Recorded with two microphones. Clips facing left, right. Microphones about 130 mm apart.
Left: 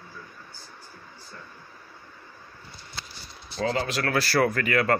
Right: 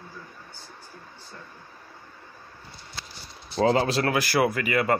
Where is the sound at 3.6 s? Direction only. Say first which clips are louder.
Right 5 dB; 30° right (ahead or behind).